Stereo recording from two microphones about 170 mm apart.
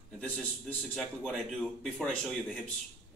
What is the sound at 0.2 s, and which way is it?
A man's voice, 5° left (ahead or behind).